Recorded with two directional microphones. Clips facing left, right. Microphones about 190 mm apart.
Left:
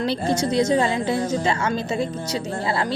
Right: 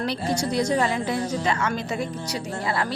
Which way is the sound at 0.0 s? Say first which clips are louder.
Left 3 dB; 25° left (ahead or behind).